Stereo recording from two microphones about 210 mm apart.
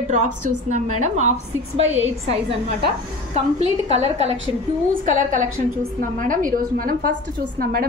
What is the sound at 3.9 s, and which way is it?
A woman's voice, 30° right (ahead or behind).